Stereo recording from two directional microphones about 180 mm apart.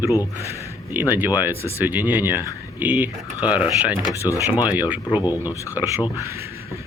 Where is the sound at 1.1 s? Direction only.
10° right (ahead or behind).